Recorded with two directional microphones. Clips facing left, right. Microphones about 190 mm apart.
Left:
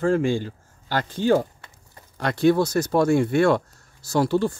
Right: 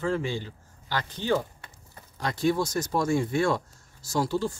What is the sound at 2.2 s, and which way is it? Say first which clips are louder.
Speech: left 7 dB; 65° left (ahead or behind).